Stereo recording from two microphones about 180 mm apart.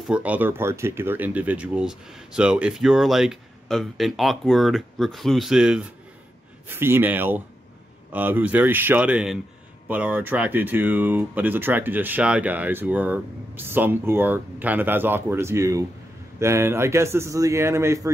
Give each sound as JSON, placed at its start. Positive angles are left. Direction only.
{"t": 0.1, "sound": "speech", "side_deg": -10}